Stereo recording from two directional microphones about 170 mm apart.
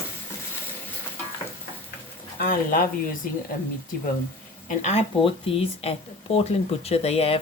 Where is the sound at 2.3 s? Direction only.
55° left (ahead or behind).